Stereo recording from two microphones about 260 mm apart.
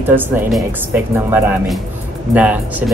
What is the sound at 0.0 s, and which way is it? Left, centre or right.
Speech, centre.